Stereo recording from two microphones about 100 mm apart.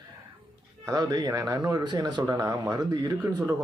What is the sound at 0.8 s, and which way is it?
Speech, 40° right (ahead or behind).